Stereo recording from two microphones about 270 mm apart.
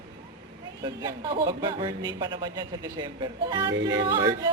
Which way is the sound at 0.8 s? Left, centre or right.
Centre.